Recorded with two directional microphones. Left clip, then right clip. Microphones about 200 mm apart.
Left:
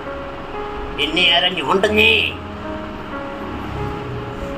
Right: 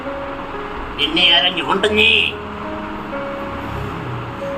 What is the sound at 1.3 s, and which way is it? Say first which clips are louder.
Speech: right 1 dB; 40° left (ahead or behind).